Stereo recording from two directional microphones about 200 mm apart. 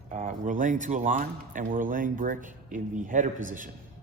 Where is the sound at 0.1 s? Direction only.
40° right (ahead or behind).